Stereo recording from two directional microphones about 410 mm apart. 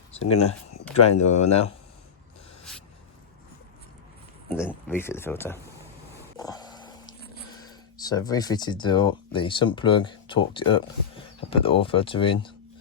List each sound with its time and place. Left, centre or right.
0.2 s speech: centre
4.4 s speech: centre
6.3 s a sound: centre
7.9 s speech: centre